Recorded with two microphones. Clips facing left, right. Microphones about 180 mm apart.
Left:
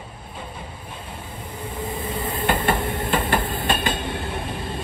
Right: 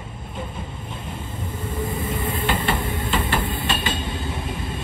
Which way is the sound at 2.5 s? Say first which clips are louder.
Left 4 dB; 50° left (ahead or behind).